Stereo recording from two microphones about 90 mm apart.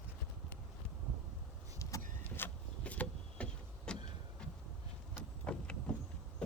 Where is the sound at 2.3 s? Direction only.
20° left (ahead or behind).